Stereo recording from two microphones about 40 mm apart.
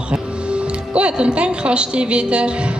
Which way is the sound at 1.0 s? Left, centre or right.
Right.